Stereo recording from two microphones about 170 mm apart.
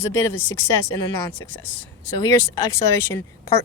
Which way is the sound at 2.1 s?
20° left (ahead or behind).